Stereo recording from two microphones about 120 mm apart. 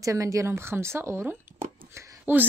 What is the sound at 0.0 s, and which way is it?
Speech, 25° right (ahead or behind).